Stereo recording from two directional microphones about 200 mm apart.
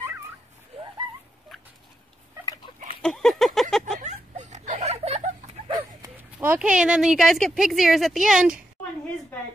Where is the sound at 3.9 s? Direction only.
35° right (ahead or behind).